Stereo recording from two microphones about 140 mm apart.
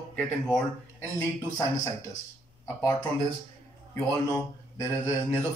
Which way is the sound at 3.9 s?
20° left (ahead or behind).